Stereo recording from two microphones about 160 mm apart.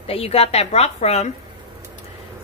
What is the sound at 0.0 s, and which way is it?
A woman's voice, 40° left (ahead or behind).